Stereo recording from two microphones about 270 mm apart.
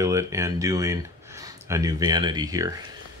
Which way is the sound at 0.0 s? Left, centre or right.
Centre.